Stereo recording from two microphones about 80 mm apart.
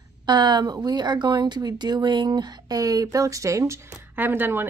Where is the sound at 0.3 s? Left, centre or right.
Right.